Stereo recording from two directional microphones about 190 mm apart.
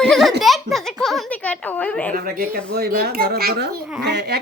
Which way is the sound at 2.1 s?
50° right (ahead or behind).